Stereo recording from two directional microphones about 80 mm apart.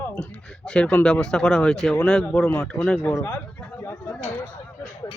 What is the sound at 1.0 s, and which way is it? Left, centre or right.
Speech, centre.